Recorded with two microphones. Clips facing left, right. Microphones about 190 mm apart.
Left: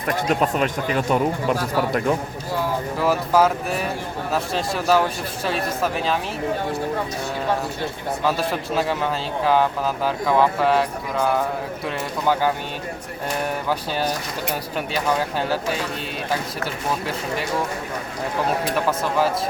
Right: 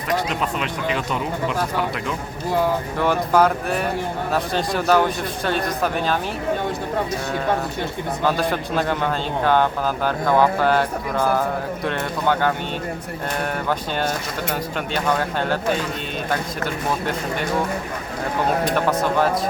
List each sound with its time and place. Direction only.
0.1 s speech: 45° left (ahead or behind)
3.0 s speech: 5° left (ahead or behind)
8.2 s speech: centre (ahead or behind)
14.9 s speech: 5° left (ahead or behind)